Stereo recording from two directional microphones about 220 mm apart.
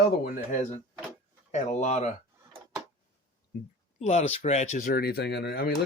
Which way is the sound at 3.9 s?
30° left (ahead or behind).